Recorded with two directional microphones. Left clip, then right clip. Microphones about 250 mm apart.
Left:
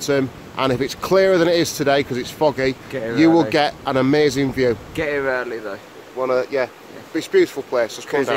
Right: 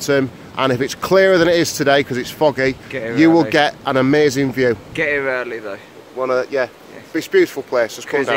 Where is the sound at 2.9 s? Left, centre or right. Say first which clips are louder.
Right 1 dB; centre.